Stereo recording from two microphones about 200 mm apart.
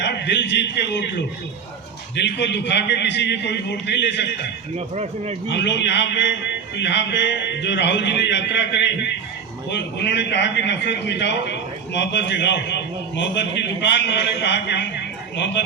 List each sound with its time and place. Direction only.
0.0 s a man's voice: 60° left (ahead or behind)
2.1 s a man's voice: 60° left (ahead or behind)
4.9 s speech: 35° right (ahead or behind)
5.5 s a man's voice: 60° left (ahead or behind)